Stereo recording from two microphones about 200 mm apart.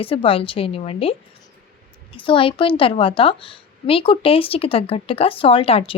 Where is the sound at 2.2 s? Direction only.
25° left (ahead or behind).